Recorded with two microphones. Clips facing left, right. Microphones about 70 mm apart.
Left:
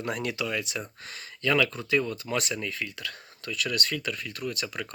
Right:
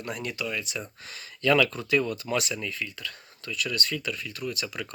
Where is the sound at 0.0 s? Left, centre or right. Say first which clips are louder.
Left 2 dB; left.